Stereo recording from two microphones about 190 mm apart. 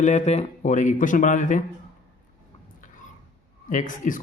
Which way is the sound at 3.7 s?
45° left (ahead or behind).